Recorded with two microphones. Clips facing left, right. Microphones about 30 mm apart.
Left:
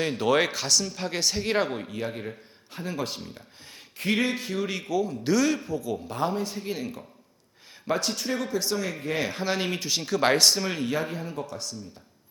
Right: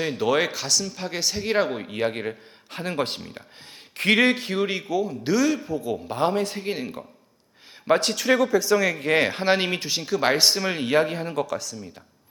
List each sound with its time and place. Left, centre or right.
0.0 s speech: centre
1.9 s a man's voice: right
2.9 s speech: right
3.9 s speech: right
4.7 s a man's voice: centre
5.7 s a man's voice: right
6.3 s speech: right
6.6 s a man's voice: right
8.1 s speech: right
9.0 s speech: right
9.4 s speech: right
9.9 s a man's voice: centre
10.3 s a man's voice: centre
10.8 s speech: right